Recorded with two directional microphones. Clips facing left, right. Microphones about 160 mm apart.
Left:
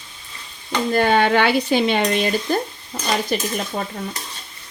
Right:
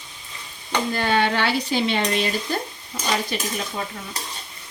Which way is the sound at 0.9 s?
50° left (ahead or behind).